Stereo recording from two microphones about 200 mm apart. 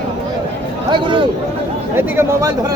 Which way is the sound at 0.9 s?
25° right (ahead or behind).